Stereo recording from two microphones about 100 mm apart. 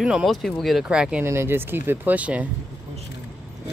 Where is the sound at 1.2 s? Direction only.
25° right (ahead or behind).